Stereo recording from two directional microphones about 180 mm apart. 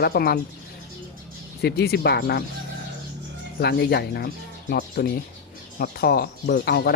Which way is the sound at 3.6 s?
60° left (ahead or behind).